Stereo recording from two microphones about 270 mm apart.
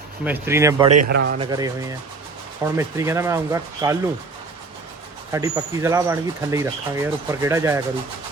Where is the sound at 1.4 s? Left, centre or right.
Centre.